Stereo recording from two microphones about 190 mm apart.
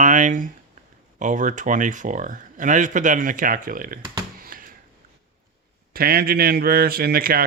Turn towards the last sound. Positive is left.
turn(degrees=-50)  # may be behind; listen again after turning